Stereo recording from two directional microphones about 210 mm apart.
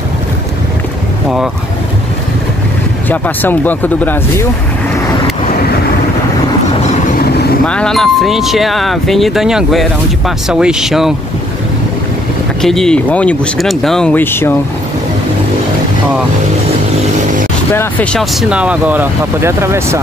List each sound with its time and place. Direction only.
3.1 s speech: 10° left (ahead or behind)
6.8 s vehicle: 35° left (ahead or behind)
7.6 s speech: 5° left (ahead or behind)
12.6 s speech: centre (ahead or behind)
17.7 s speech: 5° left (ahead or behind)
18.5 s speech: 5° right (ahead or behind)